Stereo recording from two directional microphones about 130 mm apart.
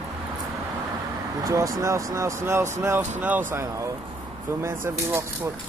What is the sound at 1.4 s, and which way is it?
Speech, 25° right (ahead or behind).